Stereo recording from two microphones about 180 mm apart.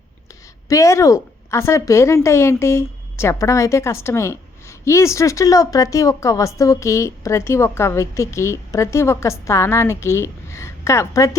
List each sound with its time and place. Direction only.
0.7 s speech: 15° left (ahead or behind)